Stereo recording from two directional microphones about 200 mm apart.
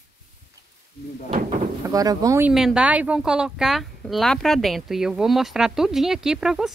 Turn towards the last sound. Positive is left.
turn(degrees=0)  # may be behind; listen again after turning